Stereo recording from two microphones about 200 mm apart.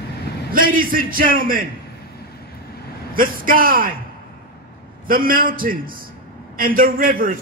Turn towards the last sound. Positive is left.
turn(degrees=-45)  # may be behind; listen again after turning